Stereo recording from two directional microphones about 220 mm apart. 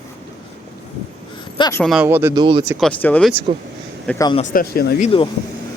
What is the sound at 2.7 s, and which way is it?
Speech, 5° left (ahead or behind).